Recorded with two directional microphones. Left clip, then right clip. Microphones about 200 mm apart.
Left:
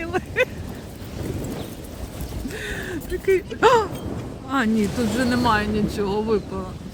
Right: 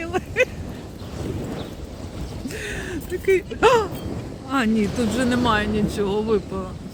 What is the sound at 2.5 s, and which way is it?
Gasp, centre (ahead or behind).